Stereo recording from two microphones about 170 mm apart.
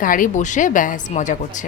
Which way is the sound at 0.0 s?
50° left (ahead or behind).